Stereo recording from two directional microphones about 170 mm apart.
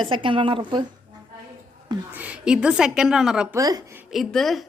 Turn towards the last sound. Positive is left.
turn(degrees=0)  # may be behind; listen again after turning